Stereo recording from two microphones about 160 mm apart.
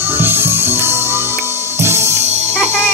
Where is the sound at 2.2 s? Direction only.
45° right (ahead or behind).